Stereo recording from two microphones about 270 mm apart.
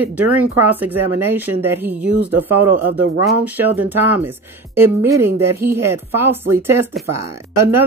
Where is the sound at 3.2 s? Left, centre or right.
Centre.